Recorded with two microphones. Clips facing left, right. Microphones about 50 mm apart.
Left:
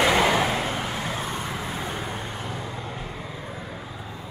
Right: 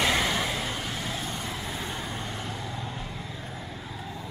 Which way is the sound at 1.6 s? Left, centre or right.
Centre.